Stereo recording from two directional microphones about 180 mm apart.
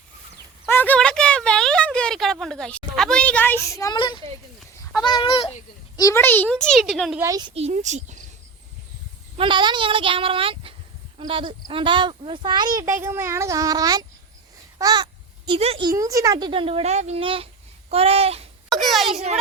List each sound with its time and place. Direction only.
0.7 s a sound: 10° left (ahead or behind)
5.0 s a child's voice: 25° left (ahead or behind)
6.0 s a child's voice: 15° left (ahead or behind)
7.2 s speech: 20° right (ahead or behind)
7.5 s a child's voice: 35° right (ahead or behind)
9.4 s speech: 25° right (ahead or behind)
14.8 s a sound: 20° right (ahead or behind)
15.9 s a child's voice: 20° right (ahead or behind); by 18.4 s 35° right (ahead or behind)
18.7 s a sound: centre (ahead or behind)